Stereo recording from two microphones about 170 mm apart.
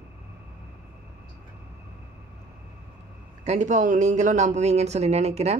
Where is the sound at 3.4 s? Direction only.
45° right (ahead or behind).